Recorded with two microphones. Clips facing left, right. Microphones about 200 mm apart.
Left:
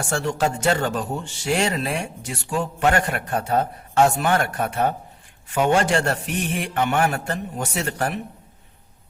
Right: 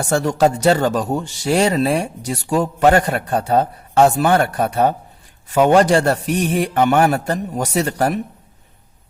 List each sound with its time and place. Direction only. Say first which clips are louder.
0.0 s speech: right 7 dB; 40° right (ahead or behind)